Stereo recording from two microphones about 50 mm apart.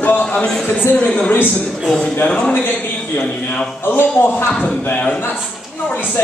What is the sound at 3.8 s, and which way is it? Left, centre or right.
Speech, left.